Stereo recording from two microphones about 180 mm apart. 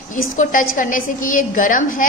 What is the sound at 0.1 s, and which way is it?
A woman's voice, 45° left (ahead or behind).